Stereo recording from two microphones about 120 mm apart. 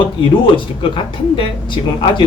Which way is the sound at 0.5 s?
45° left (ahead or behind).